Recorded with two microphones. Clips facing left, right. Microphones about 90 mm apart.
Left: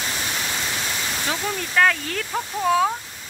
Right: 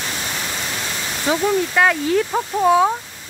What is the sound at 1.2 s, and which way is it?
Speech, 15° right (ahead or behind).